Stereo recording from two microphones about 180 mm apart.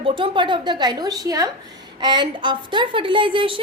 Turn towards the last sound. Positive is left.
turn(degrees=-30)  # may be behind; listen again after turning